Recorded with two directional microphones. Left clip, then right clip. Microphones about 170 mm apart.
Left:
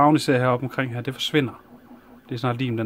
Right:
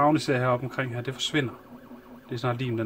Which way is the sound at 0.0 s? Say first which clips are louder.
Left 5 dB; 45° left (ahead or behind).